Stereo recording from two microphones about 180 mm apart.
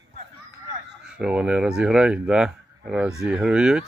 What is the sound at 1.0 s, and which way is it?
Speech, 5° right (ahead or behind).